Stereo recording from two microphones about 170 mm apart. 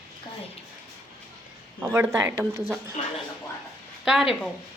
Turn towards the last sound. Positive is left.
turn(degrees=0)  # may be behind; listen again after turning